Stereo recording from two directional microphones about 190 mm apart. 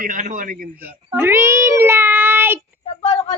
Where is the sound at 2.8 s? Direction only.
30° left (ahead or behind).